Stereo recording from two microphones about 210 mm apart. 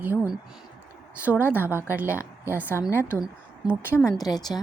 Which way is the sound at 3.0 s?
5° right (ahead or behind).